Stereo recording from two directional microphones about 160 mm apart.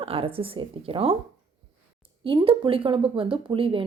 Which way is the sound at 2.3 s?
30° right (ahead or behind).